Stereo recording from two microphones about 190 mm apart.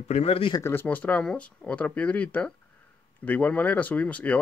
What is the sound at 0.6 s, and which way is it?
Speech, 10° left (ahead or behind).